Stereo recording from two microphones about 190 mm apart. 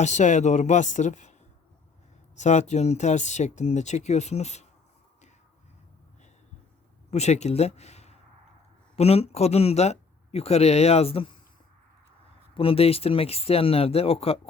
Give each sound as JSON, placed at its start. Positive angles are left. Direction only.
{"t": 0.0, "sound": "speech", "side_deg": 40}
{"t": 2.4, "sound": "speech", "side_deg": 35}
{"t": 7.1, "sound": "speech", "side_deg": 35}
{"t": 12.5, "sound": "speech", "side_deg": 30}